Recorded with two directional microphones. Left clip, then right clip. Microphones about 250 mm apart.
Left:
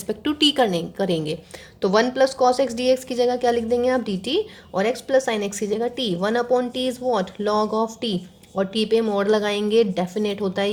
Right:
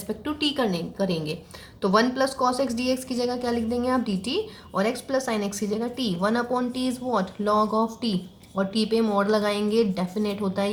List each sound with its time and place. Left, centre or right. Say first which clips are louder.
0.1 s a woman's voice: left 7 dB; left